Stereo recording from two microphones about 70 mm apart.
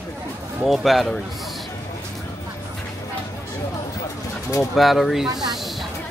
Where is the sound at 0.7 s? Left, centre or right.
Centre.